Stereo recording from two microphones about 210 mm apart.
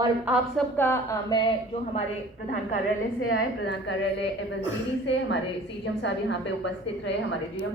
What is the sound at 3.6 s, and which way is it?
A woman's voice, 55° left (ahead or behind).